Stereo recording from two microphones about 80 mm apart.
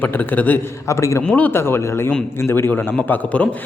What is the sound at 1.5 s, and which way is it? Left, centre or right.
A man's voice, left.